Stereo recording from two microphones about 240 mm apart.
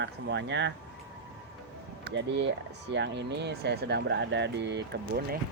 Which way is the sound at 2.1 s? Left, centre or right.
Right.